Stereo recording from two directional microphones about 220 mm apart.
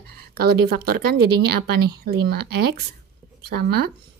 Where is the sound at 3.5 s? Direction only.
45° right (ahead or behind).